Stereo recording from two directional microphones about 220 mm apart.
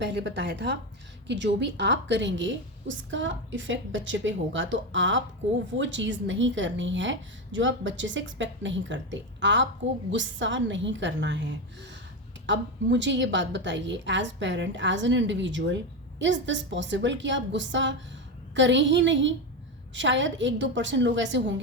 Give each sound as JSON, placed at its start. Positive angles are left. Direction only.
{"t": 0.0, "sound": "a woman's voice", "side_deg": -50}